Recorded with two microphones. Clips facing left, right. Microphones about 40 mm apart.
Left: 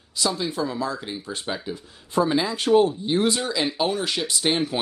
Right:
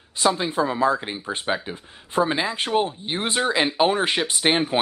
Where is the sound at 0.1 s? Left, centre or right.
Right.